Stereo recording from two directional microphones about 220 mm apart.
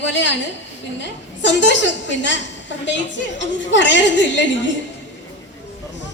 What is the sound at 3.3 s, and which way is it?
A woman's voice, 55° left (ahead or behind).